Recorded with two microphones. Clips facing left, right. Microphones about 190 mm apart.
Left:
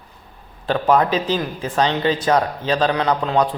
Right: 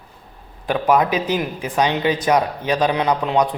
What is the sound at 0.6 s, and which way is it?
Speech, 10° right (ahead or behind).